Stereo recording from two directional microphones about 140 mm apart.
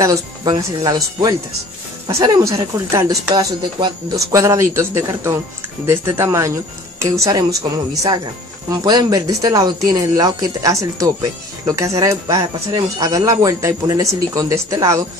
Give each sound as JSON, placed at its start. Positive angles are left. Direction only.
{"t": 0.0, "sound": "speech", "side_deg": -20}